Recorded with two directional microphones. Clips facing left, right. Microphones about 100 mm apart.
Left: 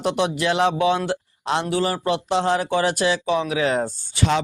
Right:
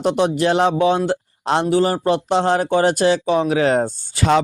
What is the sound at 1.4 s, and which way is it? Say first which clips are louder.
Speech: right 5 dB; 50° right (ahead or behind).